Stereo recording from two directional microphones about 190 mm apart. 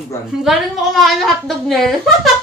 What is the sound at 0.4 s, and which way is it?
A woman's voice, centre (ahead or behind).